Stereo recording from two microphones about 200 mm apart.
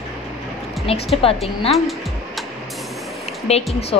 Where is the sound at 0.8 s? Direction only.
30° left (ahead or behind).